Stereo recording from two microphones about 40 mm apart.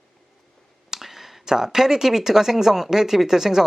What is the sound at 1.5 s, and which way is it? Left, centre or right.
A man's voice, centre.